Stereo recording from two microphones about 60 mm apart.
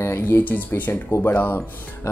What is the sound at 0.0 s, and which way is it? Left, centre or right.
Speech, left.